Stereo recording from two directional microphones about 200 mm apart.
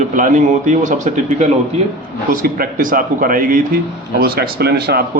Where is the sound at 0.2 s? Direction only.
40° right (ahead or behind).